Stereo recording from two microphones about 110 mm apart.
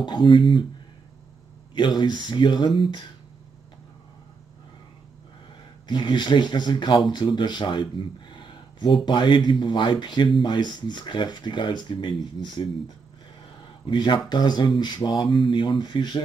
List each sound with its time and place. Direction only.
0.0 s speech: 45° left (ahead or behind)
1.8 s speech: 45° left (ahead or behind)
5.9 s speech: 45° left (ahead or behind)
13.8 s speech: 45° left (ahead or behind)